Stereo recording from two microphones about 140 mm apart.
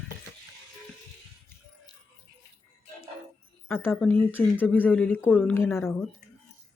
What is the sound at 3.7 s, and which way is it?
Speech, 15° left (ahead or behind).